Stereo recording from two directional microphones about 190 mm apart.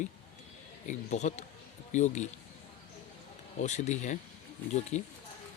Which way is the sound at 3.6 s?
40° left (ahead or behind).